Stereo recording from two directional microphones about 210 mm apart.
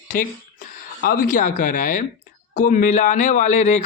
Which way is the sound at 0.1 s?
40° left (ahead or behind).